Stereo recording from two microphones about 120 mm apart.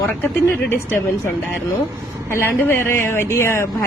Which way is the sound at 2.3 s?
20° left (ahead or behind).